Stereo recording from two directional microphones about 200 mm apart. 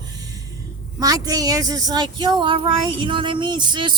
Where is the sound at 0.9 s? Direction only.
20° right (ahead or behind).